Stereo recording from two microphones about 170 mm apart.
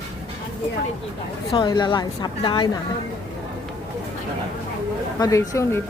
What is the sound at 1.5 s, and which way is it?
A woman's voice, 25° left (ahead or behind).